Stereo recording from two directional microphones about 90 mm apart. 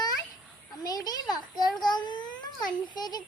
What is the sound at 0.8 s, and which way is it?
Speech, 45° left (ahead or behind).